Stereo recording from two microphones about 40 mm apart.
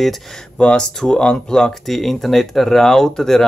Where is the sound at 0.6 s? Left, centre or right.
Left.